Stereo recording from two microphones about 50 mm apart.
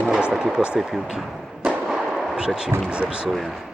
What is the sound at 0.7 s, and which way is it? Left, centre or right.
Speech, centre.